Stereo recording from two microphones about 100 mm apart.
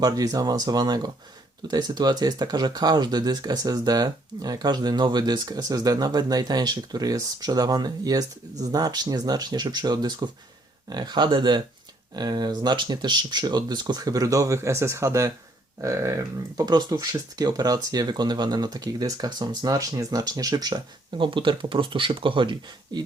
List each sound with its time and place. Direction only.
0.0 s speech: 40° right (ahead or behind)
16.6 s speech: 45° right (ahead or behind)
22.9 s speech: 45° right (ahead or behind)